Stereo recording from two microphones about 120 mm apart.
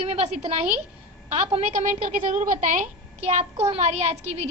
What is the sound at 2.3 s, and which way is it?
A woman's voice, 90° right.